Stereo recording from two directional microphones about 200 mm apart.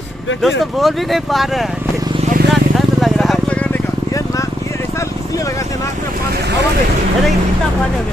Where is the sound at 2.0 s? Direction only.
25° right (ahead or behind).